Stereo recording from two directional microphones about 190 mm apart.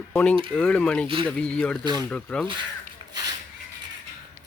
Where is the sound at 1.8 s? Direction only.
20° right (ahead or behind).